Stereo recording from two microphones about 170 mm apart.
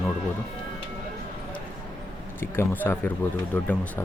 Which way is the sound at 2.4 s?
10° left (ahead or behind).